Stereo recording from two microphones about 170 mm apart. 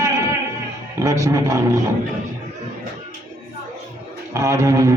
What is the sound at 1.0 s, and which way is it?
Speech, 20° right (ahead or behind).